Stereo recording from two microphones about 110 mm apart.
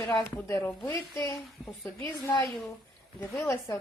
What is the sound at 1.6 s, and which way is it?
Speech, centre (ahead or behind).